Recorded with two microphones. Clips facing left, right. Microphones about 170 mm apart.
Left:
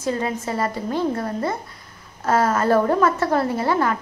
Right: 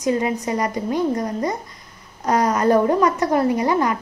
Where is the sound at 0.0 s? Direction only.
15° right (ahead or behind).